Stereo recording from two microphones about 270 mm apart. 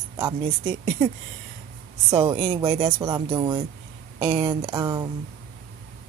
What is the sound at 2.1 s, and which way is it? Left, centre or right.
Speech, centre.